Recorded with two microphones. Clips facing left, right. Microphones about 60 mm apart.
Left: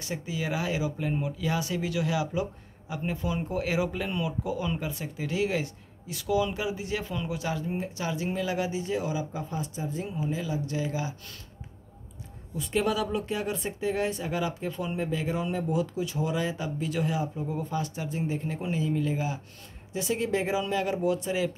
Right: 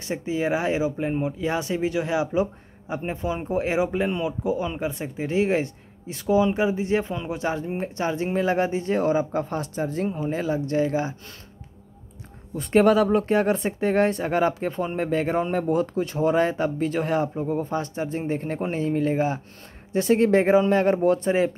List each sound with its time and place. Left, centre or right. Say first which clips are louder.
0.0 s speech: right 7 dB; right
10.0 s speech: right 6 dB; right
12.5 s speech: right 10 dB; right
15.0 s speech: right 8 dB; right